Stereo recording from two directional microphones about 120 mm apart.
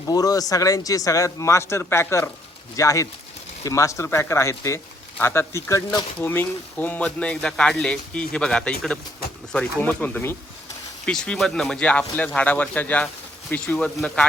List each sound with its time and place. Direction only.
0.1 s speech: 30° left (ahead or behind); by 14.3 s 10° left (ahead or behind)